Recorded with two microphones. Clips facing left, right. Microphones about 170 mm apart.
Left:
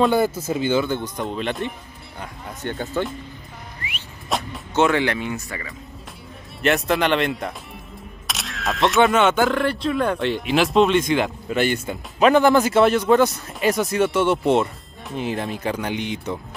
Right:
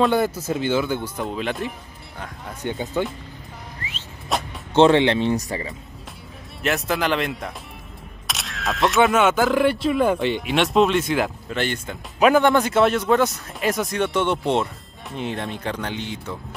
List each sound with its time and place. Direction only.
0.0 s speech: centre (ahead or behind)
2.6 s speech: 15° right (ahead or behind)
4.3 s music: centre (ahead or behind)
4.7 s speech: 25° right (ahead or behind)
6.6 s speech: centre (ahead or behind)
11.4 s speech: 10° left (ahead or behind)
12.2 s speech: 5° right (ahead or behind); by 16.3 s 15° left (ahead or behind)